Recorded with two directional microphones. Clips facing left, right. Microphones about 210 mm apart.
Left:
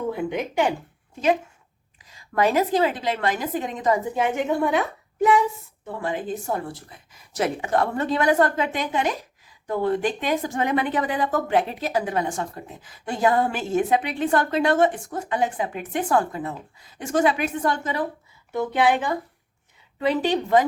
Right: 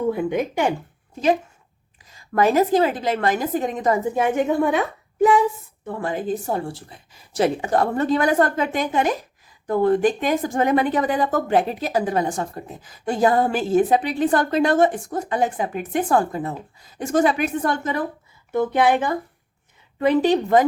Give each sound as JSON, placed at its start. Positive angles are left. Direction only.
{"t": 0.3, "sound": "a woman's voice", "side_deg": -45}
{"t": 2.0, "sound": "a woman's voice", "side_deg": -45}
{"t": 6.0, "sound": "a woman's voice", "side_deg": -40}